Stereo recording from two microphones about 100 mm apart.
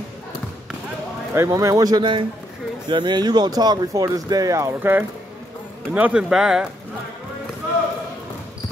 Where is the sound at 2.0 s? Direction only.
55° right (ahead or behind); by 4.7 s 30° right (ahead or behind).